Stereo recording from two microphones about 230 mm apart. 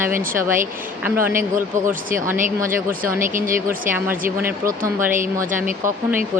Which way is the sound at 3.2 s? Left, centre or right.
Right.